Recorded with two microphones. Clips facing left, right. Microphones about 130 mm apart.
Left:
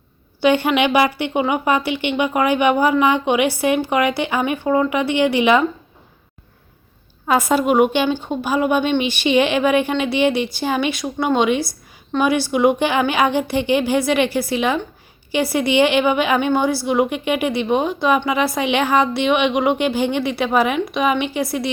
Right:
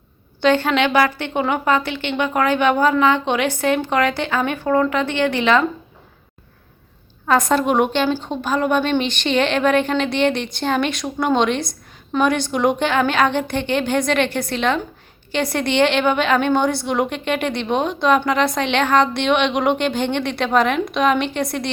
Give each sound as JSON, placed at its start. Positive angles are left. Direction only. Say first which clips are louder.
{"t": 0.4, "sound": "a woman's voice", "louder": "left 1 dB", "side_deg": 10}
{"t": 7.3, "sound": "a woman's voice", "louder": "even", "side_deg": 5}